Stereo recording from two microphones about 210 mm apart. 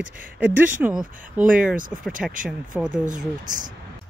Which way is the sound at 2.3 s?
40° right (ahead or behind).